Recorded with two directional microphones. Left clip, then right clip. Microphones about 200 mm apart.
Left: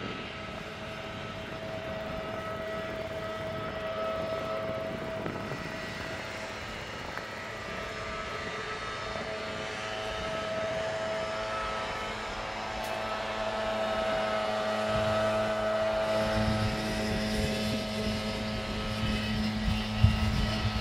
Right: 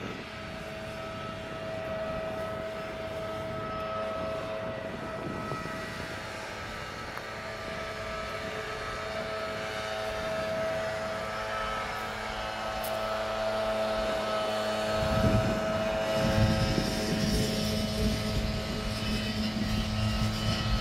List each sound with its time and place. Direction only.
10.6 s vehicle: 55° right (ahead or behind)
13.5 s vehicle: 55° right (ahead or behind)